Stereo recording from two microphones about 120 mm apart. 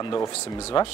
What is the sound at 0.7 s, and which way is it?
Speech, 50° left (ahead or behind).